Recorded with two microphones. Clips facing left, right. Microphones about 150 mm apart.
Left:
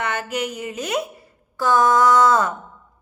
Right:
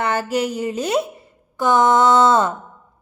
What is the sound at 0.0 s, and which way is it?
Speech, 35° right (ahead or behind).